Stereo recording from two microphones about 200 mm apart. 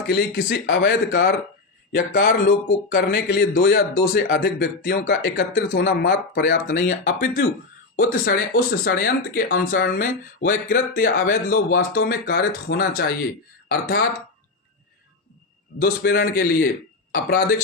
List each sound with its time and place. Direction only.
0.1 s speech: 60° left (ahead or behind)
1.9 s speech: 40° left (ahead or behind)
3.2 s speech: 60° left (ahead or behind)
4.4 s speech: 50° left (ahead or behind)
6.7 s speech: 40° left (ahead or behind)
15.8 s speech: 50° left (ahead or behind)